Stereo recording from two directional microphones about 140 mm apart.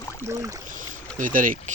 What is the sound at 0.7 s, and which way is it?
Boat, 70° right (ahead or behind).